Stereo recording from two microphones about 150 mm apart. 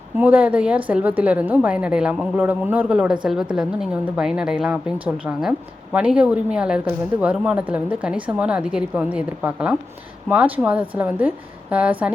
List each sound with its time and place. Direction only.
0.2 s a woman's voice: 10° right (ahead or behind)